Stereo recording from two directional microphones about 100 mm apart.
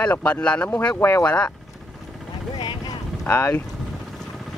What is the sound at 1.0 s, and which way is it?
Speech, 25° left (ahead or behind).